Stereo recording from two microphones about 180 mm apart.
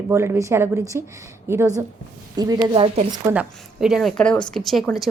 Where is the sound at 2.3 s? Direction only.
20° right (ahead or behind).